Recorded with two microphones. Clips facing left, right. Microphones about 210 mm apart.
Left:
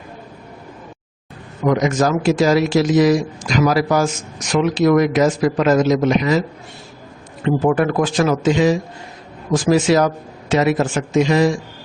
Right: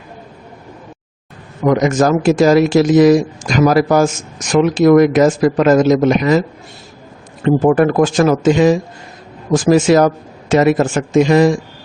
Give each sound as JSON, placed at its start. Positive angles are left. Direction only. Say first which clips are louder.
{"t": 1.6, "sound": "speech", "louder": "right 4 dB", "side_deg": -50}
{"t": 7.4, "sound": "speech", "louder": "right 5 dB", "side_deg": -45}